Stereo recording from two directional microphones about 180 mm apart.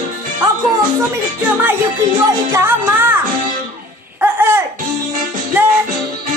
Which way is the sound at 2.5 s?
15° right (ahead or behind).